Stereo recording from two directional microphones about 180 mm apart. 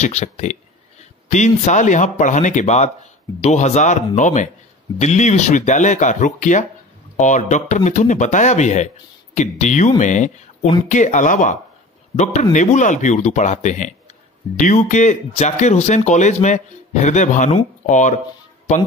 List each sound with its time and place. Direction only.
0.0 s speech: 40° left (ahead or behind)